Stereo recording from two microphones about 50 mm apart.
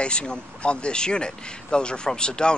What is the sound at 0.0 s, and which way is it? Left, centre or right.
Speech, left.